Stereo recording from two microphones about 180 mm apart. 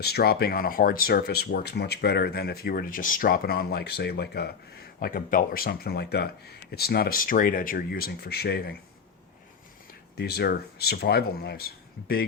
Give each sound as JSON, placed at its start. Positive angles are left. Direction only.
{"t": 0.0, "sound": "speech", "side_deg": 60}
{"t": 10.2, "sound": "speech", "side_deg": 60}